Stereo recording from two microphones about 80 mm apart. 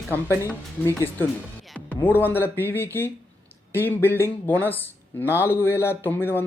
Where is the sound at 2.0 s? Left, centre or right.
Left.